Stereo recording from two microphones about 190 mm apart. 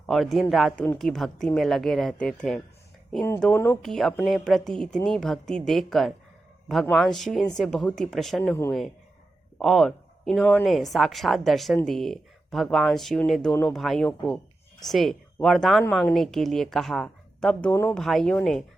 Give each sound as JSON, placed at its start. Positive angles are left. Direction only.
{"t": 0.0, "sound": "a man's voice", "side_deg": 0}
{"t": 9.6, "sound": "a woman's voice", "side_deg": 0}